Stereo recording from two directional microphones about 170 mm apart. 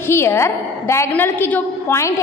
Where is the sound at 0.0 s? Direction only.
15° left (ahead or behind).